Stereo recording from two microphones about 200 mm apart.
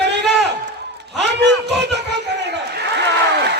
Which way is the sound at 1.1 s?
60° right (ahead or behind).